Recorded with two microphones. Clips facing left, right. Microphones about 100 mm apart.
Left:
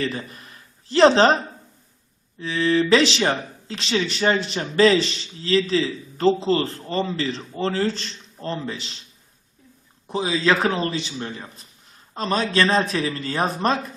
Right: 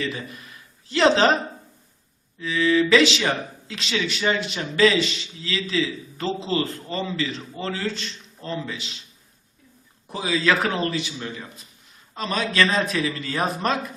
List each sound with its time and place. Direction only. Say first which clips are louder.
0.0 s speech: left 2 dB; 40° left (ahead or behind)
2.4 s a man's voice: even; 35° left (ahead or behind)
10.1 s a man's voice: left 2 dB; 25° left (ahead or behind)